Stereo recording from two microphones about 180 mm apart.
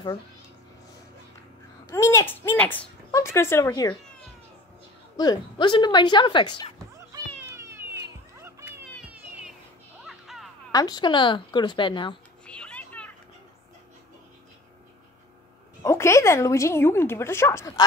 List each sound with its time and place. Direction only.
1.9 s speech: 15° left (ahead or behind)
5.1 s a woman's voice: 20° left (ahead or behind)
7.1 s children playing: 15° right (ahead or behind)
10.0 s a sound: centre (ahead or behind)
10.7 s a woman's voice: 20° left (ahead or behind)
12.4 s children playing: 5° left (ahead or behind)
15.8 s speech: 15° left (ahead or behind)